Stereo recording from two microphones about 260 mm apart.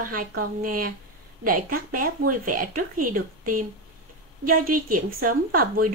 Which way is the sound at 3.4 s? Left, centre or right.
Right.